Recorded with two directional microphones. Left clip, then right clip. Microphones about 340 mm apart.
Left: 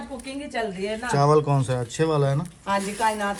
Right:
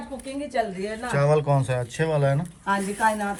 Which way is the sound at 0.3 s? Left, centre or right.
Centre.